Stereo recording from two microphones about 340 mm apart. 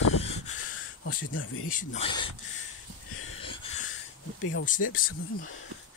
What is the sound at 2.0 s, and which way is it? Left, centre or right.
Speech, centre.